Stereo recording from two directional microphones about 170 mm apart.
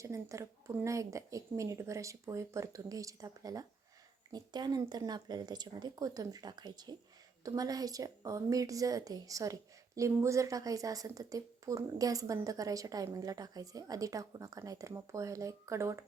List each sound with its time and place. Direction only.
0.0 s a woman's voice: 15° right (ahead or behind)